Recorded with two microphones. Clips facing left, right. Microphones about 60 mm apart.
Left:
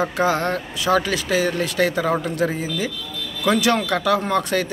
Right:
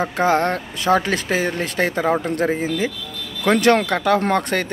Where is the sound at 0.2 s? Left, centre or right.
Right.